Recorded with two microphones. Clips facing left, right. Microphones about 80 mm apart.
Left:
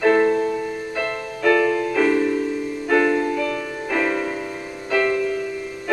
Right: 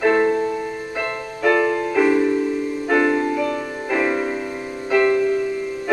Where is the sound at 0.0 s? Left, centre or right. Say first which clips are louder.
Even; centre.